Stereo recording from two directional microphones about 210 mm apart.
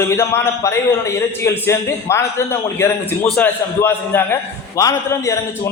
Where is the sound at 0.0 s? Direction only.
10° left (ahead or behind).